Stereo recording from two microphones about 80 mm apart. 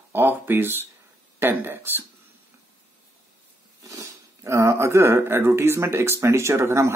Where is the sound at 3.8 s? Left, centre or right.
Right.